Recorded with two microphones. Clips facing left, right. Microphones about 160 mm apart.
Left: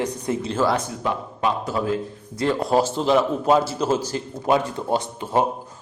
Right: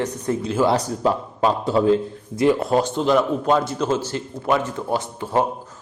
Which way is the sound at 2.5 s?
Centre (ahead or behind).